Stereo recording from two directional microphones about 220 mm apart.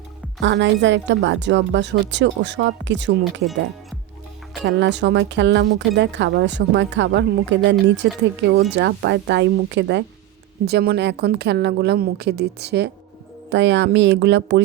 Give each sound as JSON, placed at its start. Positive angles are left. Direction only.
{"t": 0.4, "sound": "speech", "side_deg": -55}
{"t": 4.6, "sound": "speech", "side_deg": -55}